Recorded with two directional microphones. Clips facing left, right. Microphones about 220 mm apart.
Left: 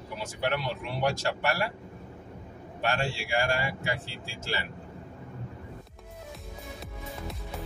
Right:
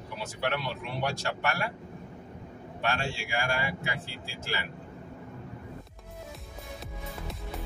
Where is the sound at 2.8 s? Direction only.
35° left (ahead or behind).